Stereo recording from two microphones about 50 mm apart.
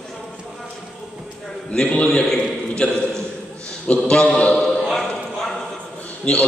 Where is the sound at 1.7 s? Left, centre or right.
Left.